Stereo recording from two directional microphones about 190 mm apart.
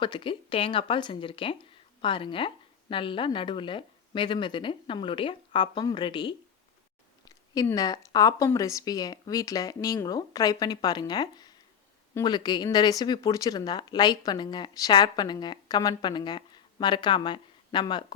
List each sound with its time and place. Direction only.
0.0 s speech: 25° left (ahead or behind)